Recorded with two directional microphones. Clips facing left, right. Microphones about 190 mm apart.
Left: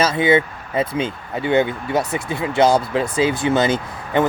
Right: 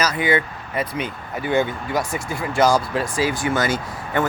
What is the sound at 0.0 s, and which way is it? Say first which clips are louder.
Speech: left 4 dB; 25° left (ahead or behind).